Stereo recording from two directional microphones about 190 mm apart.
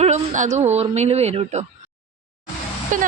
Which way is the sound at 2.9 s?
45° right (ahead or behind).